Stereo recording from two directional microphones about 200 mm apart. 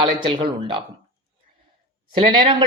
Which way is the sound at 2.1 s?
25° right (ahead or behind).